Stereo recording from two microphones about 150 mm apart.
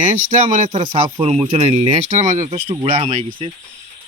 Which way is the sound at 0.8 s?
30° right (ahead or behind).